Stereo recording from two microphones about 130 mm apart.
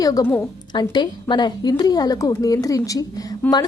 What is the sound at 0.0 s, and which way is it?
A woman's voice, 30° left (ahead or behind).